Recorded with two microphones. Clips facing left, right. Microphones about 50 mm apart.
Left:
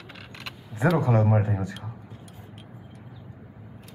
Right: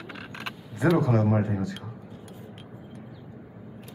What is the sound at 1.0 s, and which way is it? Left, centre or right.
Speech, left.